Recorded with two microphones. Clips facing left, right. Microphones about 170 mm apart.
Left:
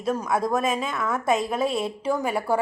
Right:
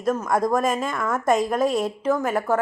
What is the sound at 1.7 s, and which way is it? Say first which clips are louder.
Speech: right 3 dB; 50° right (ahead or behind).